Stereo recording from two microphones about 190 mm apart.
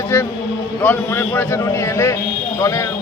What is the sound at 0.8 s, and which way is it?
A man's voice, 10° left (ahead or behind).